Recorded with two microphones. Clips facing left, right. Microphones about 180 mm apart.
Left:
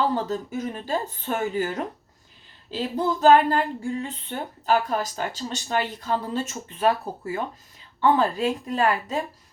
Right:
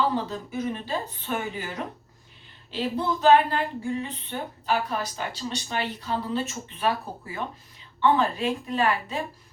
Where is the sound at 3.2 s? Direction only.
45° left (ahead or behind).